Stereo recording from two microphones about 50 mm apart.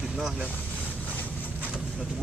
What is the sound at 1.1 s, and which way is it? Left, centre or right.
Vehicle, left.